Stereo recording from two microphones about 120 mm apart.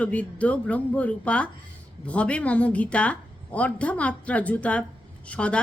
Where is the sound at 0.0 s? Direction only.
10° left (ahead or behind).